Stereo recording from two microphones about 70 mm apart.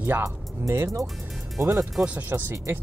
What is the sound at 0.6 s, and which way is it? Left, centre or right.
Speech, right.